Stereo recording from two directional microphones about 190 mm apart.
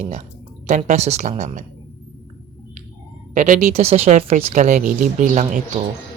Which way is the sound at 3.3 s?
40° right (ahead or behind).